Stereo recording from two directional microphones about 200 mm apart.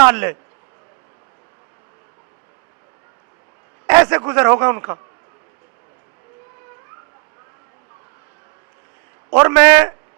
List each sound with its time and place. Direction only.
0.0 s a man's voice: 15° right (ahead or behind)
3.8 s a sound: 20° right (ahead or behind)
4.2 s a man's voice: 20° right (ahead or behind)
9.3 s a man's voice: 15° right (ahead or behind)